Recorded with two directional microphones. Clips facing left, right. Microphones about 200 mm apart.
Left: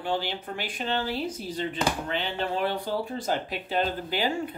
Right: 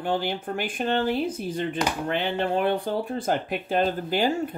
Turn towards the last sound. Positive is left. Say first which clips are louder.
# right 4 dB
turn(degrees=-45)  # may be behind; listen again after turning